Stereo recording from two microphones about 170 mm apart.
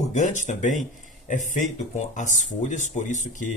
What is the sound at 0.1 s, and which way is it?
Speech, 45° left (ahead or behind).